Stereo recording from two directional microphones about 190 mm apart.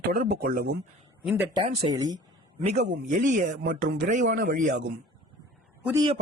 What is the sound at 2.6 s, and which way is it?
Speech, 35° right (ahead or behind).